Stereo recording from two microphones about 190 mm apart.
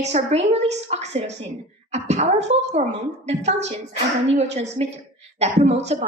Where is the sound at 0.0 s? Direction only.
35° right (ahead or behind).